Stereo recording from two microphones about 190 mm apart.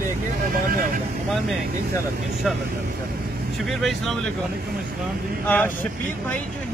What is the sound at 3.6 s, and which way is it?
Speech, centre (ahead or behind).